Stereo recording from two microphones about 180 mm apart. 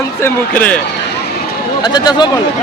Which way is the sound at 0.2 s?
10° left (ahead or behind).